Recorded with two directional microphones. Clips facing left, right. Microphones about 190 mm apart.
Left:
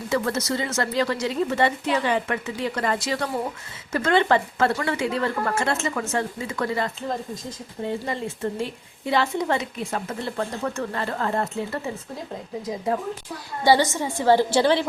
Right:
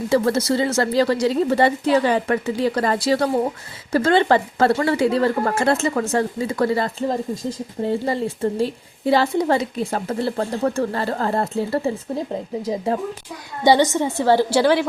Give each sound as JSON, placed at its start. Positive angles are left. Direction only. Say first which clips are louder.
{"t": 0.1, "sound": "a woman's voice", "louder": "right 6 dB", "side_deg": -30}
{"t": 12.9, "sound": "a woman's voice", "louder": "right 2 dB", "side_deg": -30}
{"t": 13.7, "sound": "a woman's voice", "louder": "right 4 dB", "side_deg": -20}
{"t": 14.2, "sound": "a woman's voice", "louder": "right 1 dB", "side_deg": 15}